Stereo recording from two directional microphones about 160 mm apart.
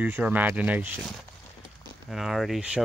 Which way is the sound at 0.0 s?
10° right (ahead or behind).